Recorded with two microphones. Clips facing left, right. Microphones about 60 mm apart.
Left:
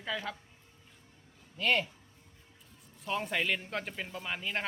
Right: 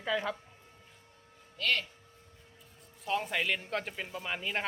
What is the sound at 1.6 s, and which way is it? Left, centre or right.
Speech, centre.